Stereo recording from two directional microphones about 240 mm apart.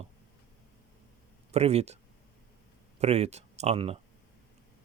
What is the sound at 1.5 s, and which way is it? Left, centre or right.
Speech, right.